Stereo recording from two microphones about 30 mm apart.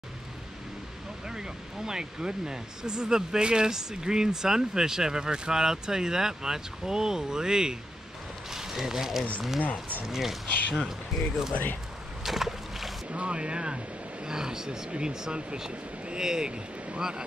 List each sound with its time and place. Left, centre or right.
1.3 s speech: right
8.5 s a sound: centre
10.0 s speech: centre
12.3 s a sound: centre
13.1 s speech: right
14.2 s speech: right
14.9 s speech: right